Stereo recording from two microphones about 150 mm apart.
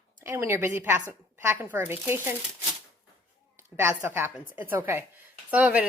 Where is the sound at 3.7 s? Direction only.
15° right (ahead or behind).